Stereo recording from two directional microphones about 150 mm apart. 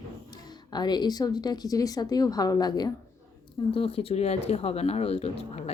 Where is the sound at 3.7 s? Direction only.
40° left (ahead or behind).